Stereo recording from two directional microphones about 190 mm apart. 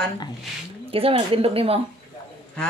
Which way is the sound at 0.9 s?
30° right (ahead or behind).